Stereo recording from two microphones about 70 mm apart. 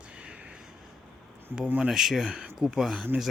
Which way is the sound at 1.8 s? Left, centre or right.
Centre.